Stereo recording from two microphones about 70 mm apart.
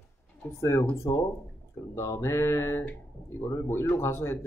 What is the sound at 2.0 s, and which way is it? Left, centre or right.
A man's voice, left.